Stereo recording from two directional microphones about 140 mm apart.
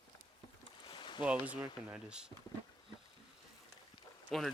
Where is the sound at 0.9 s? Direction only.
35° left (ahead or behind).